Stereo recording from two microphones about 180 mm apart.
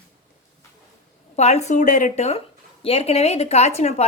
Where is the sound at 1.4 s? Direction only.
40° left (ahead or behind).